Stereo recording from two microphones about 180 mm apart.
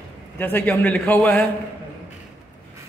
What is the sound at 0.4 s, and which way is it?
A man's voice, 10° left (ahead or behind).